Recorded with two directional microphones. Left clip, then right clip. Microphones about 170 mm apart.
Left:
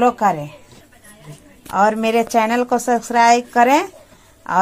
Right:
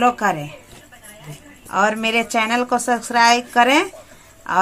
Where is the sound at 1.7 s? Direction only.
60° left (ahead or behind).